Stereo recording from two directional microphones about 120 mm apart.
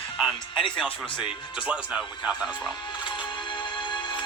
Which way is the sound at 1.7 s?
10° right (ahead or behind).